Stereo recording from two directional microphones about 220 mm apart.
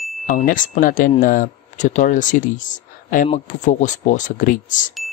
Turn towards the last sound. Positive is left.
turn(degrees=35)  # may be behind; listen again after turning